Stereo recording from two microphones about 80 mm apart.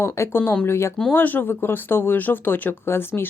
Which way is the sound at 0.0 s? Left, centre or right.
Left.